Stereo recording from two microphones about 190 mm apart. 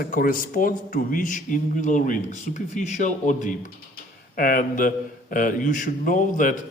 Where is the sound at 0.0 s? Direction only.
50° left (ahead or behind).